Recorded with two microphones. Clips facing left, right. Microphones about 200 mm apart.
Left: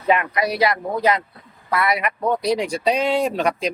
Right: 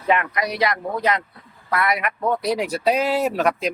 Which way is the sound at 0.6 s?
5° left (ahead or behind).